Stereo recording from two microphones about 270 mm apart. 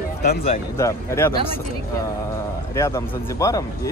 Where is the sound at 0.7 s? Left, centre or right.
Centre.